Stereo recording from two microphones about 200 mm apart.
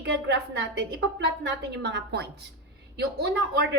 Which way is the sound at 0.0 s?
60° right (ahead or behind).